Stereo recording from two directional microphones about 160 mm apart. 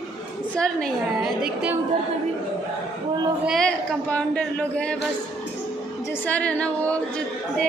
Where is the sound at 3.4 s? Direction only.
5° left (ahead or behind).